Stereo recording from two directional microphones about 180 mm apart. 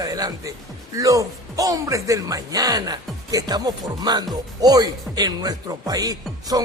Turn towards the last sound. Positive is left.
turn(degrees=-20)  # may be behind; listen again after turning